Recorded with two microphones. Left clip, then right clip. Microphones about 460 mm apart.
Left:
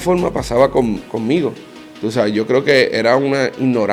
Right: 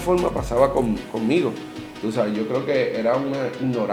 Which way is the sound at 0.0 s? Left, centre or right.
Left.